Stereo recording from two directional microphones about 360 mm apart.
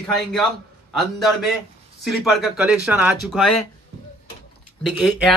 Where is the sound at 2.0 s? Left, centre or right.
Centre.